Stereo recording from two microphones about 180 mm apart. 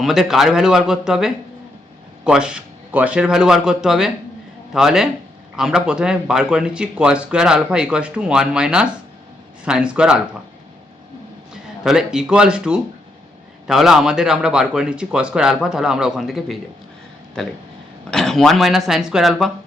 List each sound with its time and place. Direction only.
0.0 s speech: centre (ahead or behind)
11.5 s speech: 5° right (ahead or behind)
18.1 s speech: centre (ahead or behind)